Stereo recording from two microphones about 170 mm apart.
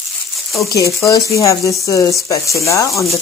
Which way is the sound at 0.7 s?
20° left (ahead or behind).